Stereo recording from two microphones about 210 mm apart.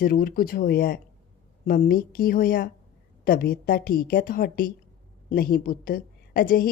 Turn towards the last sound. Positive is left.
turn(degrees=45)  # may be behind; listen again after turning